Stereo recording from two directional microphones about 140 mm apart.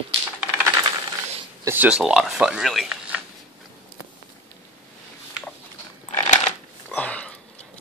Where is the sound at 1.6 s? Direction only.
15° right (ahead or behind).